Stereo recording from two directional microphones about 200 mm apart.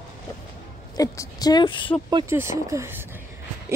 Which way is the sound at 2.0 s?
15° right (ahead or behind).